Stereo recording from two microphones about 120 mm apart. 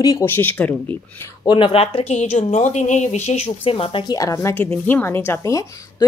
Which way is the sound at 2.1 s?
75° left (ahead or behind).